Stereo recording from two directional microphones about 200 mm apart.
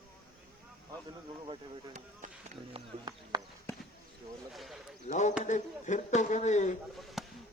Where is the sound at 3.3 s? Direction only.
20° right (ahead or behind).